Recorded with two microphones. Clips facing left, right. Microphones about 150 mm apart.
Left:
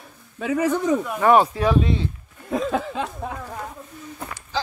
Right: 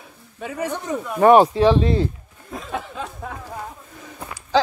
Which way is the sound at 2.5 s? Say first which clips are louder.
Left 7 dB; 90° left.